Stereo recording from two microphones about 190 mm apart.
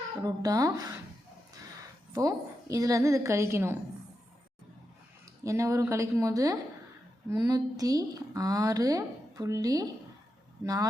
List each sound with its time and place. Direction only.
0.2 s speech: 20° right (ahead or behind)
2.1 s a woman's voice: 15° right (ahead or behind)
5.4 s a woman's voice: 15° right (ahead or behind)